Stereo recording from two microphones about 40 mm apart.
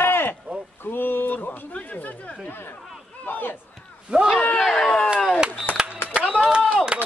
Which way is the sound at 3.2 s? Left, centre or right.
Left.